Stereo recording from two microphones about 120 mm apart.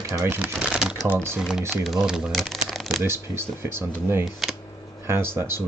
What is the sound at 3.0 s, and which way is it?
Speech, 20° right (ahead or behind).